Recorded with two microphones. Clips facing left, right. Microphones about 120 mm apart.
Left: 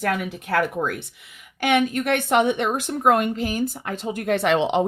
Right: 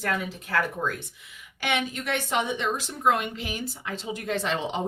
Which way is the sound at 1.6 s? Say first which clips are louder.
Left 8 dB; 50° left (ahead or behind).